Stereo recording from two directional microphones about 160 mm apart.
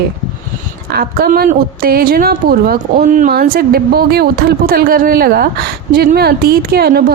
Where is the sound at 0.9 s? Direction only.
70° right (ahead or behind).